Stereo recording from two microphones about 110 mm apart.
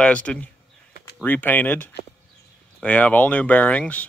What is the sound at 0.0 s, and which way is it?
Speech, 10° left (ahead or behind).